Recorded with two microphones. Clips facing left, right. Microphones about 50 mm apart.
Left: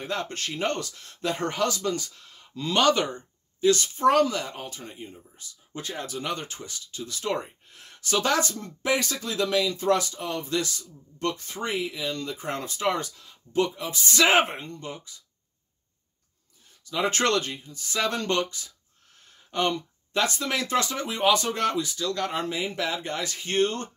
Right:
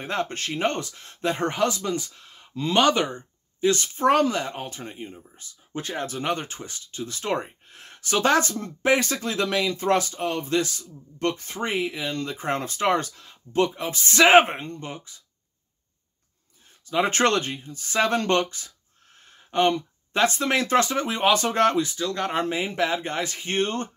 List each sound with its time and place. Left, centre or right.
0.0 s speech: right
3.6 s speech: right
16.8 s speech: right
21.9 s speech: right